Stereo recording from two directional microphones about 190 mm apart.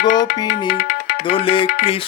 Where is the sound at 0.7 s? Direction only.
50° left (ahead or behind).